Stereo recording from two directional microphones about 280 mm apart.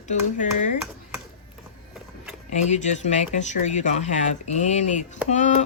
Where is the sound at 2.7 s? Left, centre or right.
Left.